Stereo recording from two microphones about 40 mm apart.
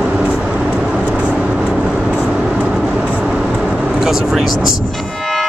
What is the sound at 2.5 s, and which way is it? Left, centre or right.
Train, right.